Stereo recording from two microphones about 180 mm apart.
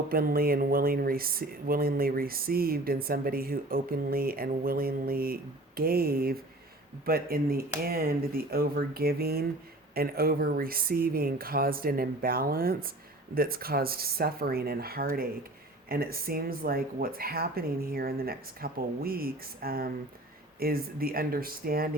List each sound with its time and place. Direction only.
0.1 s speech: 55° right (ahead or behind)